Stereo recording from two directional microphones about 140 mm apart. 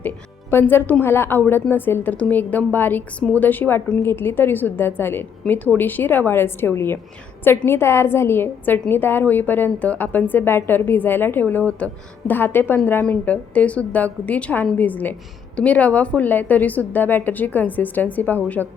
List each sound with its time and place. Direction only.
0.5 s a woman's voice: 15° left (ahead or behind)